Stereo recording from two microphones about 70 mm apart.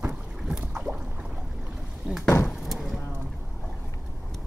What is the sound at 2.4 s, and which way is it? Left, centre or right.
Chop, centre.